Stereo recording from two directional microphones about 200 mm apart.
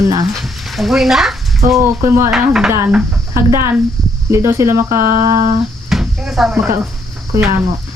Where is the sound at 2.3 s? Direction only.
Centre (ahead or behind).